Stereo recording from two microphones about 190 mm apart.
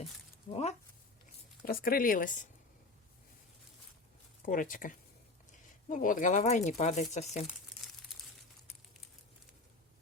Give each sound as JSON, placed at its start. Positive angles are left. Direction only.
{"t": 0.5, "sound": "speech", "side_deg": 35}
{"t": 1.6, "sound": "speech", "side_deg": 50}
{"t": 4.4, "sound": "speech", "side_deg": 45}